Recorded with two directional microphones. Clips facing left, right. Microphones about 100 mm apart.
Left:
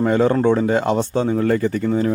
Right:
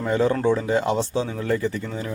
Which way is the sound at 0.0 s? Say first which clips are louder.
Left 5 dB; 50° left (ahead or behind).